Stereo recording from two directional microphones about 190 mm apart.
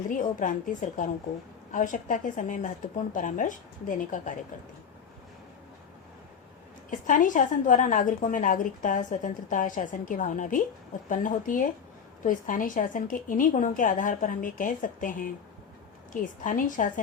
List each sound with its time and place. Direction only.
0.1 s a woman's voice: 40° left (ahead or behind)
7.1 s a woman's voice: 45° left (ahead or behind)
16.2 s a woman's voice: 45° left (ahead or behind)